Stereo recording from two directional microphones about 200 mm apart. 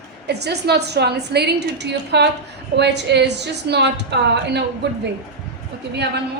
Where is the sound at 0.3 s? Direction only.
55° right (ahead or behind).